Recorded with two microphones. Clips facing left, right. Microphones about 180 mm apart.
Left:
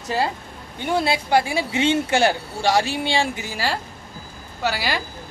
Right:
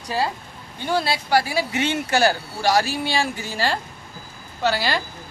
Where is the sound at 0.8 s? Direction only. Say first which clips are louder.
Left 1 dB; 25° left (ahead or behind).